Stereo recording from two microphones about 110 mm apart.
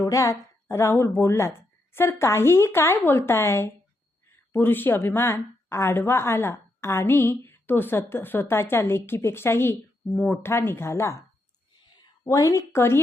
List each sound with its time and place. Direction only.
0.0 s a woman's voice: 30° left (ahead or behind)
12.2 s a woman's voice: 30° left (ahead or behind)